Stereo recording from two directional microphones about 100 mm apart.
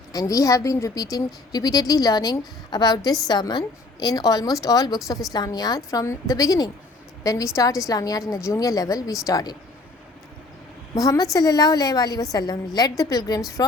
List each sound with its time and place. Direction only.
0.1 s a woman's voice: 35° left (ahead or behind)
10.9 s a woman's voice: 35° left (ahead or behind)